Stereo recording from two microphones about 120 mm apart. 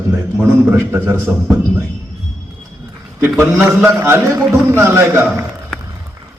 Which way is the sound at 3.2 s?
15° right (ahead or behind).